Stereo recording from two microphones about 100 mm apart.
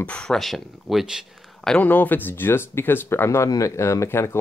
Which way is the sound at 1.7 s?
15° left (ahead or behind).